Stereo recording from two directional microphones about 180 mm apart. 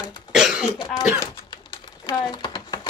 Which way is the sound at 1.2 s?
25° left (ahead or behind).